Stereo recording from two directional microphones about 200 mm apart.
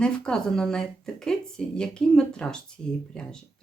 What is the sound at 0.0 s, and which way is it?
Speech, 5° left (ahead or behind).